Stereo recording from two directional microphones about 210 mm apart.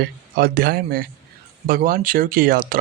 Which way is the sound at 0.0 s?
45° right (ahead or behind).